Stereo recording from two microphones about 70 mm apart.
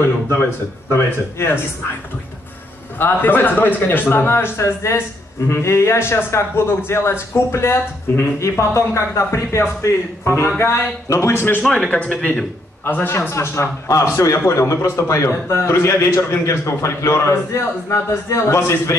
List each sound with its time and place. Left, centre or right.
0.0 s a man's voice: left
3.0 s a man's voice: left
11.6 s speech: centre
12.8 s a man's voice: left
13.3 s a man's voice: left